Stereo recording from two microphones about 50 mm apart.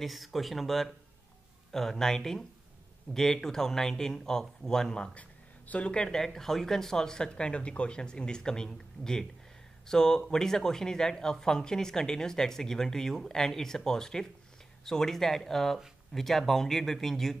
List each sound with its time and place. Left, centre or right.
0.0 s speech: centre
5.7 s speech: left
5.9 s speech: centre